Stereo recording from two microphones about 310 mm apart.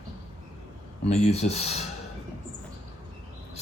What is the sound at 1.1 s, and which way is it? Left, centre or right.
Speech, left.